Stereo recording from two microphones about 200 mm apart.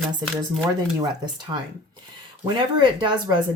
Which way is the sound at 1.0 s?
20° right (ahead or behind).